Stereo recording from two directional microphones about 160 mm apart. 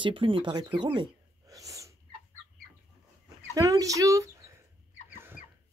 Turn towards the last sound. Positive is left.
turn(degrees=-20)  # may be behind; listen again after turning